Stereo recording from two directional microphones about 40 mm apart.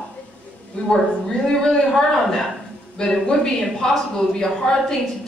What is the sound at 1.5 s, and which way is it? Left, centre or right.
A woman's voice, centre.